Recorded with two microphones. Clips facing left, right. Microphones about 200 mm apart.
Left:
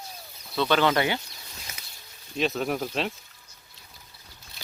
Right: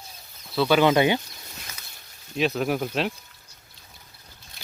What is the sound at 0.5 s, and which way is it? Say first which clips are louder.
Speech: right 4 dB; 10° right (ahead or behind).